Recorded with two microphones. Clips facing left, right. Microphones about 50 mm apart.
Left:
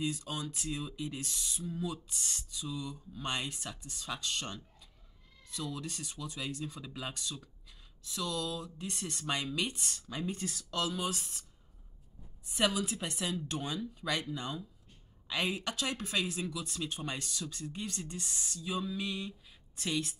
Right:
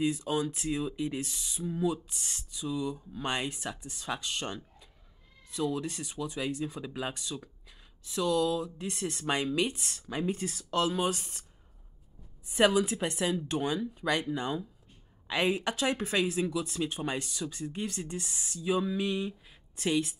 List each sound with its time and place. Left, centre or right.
0.0 s speech: centre
10.0 s speech: right
12.5 s speech: right